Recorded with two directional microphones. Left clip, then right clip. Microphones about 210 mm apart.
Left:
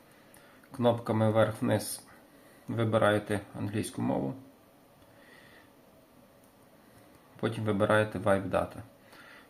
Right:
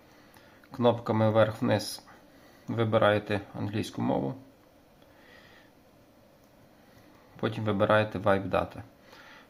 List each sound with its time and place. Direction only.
0.7 s speech: 15° right (ahead or behind)
7.3 s speech: 15° right (ahead or behind)